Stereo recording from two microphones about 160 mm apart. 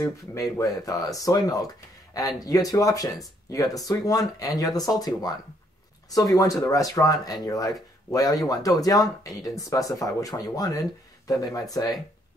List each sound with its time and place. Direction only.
0.0 s speech: 20° left (ahead or behind)